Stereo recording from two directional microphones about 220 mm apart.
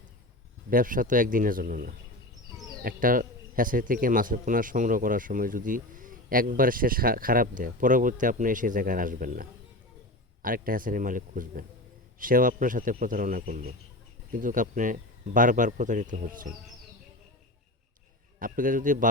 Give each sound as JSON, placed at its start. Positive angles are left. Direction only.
{"t": 0.7, "sound": "a man's voice", "side_deg": -40}
{"t": 18.3, "sound": "a man's voice", "side_deg": -40}